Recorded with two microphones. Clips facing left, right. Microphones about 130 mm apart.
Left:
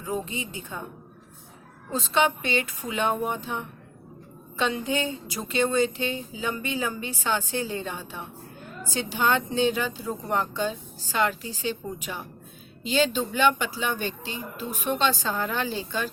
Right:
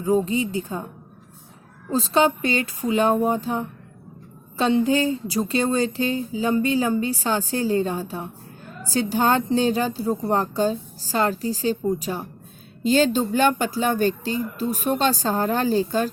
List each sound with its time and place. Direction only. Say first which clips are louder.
0.0 s speech: right 10 dB; 35° right (ahead or behind)
1.9 s speech: right 5 dB; 35° right (ahead or behind)